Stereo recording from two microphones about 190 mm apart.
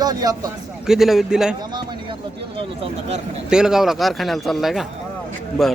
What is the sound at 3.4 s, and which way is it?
A man's voice, 5° right (ahead or behind).